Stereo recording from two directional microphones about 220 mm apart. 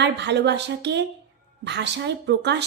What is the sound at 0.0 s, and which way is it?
A woman's voice, 50° right (ahead or behind).